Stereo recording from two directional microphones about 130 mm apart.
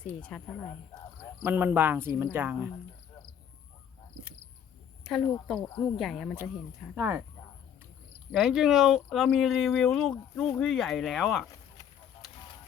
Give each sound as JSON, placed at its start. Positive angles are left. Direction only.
{"t": 0.0, "sound": "a woman's voice", "side_deg": 10}
{"t": 1.5, "sound": "speech", "side_deg": -15}
{"t": 5.0, "sound": "speech", "side_deg": 0}
{"t": 6.9, "sound": "speech", "side_deg": -15}
{"t": 8.3, "sound": "speech", "side_deg": -5}